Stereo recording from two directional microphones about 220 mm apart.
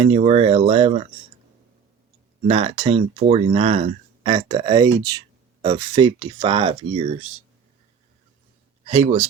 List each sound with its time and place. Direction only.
0.0 s speech: 30° right (ahead or behind)
2.5 s speech: 25° right (ahead or behind)
8.9 s speech: 30° right (ahead or behind)